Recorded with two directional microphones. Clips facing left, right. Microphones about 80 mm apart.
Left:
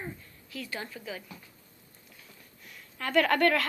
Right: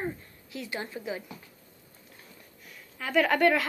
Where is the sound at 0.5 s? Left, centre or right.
Right.